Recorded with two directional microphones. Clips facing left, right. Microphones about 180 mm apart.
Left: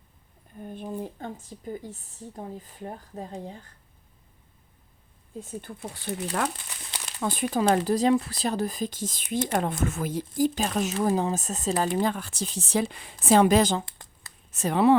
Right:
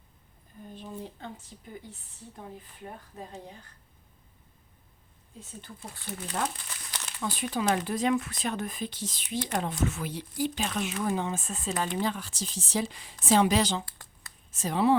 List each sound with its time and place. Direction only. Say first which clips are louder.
0.6 s a sound: left 6 dB; 55° left (ahead or behind)
0.9 s speech: left 6 dB; 45° left (ahead or behind)
5.9 s speech: left 6 dB; 70° left (ahead or behind)
7.2 s speech: left 5 dB; 55° left (ahead or behind)
7.8 s speech: left 5 dB; 35° left (ahead or behind)
14.5 s speech: left 4 dB; 65° left (ahead or behind)